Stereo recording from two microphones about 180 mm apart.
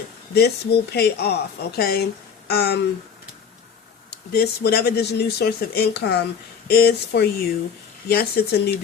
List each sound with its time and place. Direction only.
0.3 s speech: 65° left (ahead or behind)
4.1 s speech: 60° left (ahead or behind)